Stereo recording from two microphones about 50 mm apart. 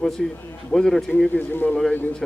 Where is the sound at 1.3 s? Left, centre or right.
Left.